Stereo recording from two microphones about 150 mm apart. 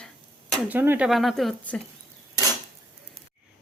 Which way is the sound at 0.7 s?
10° right (ahead or behind).